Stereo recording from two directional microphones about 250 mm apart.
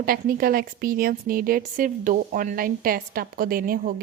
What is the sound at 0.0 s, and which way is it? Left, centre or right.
Speech, right.